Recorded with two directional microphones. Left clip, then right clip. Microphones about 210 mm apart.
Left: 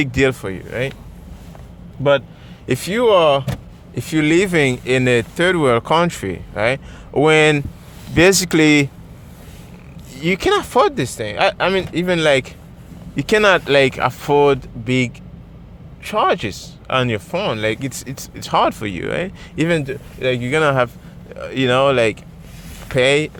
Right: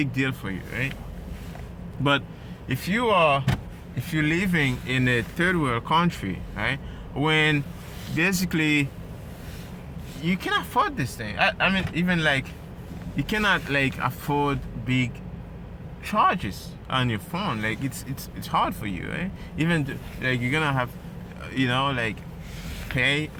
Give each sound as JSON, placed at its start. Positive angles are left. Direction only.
{"t": 0.0, "sound": "speech", "side_deg": 55}
{"t": 2.6, "sound": "speech", "side_deg": 55}
{"t": 10.2, "sound": "speech", "side_deg": 50}